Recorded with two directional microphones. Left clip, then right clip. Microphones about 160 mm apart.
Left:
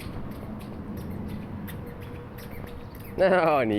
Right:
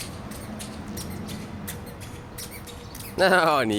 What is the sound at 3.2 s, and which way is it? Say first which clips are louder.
Speech: right 2 dB; 40° right (ahead or behind).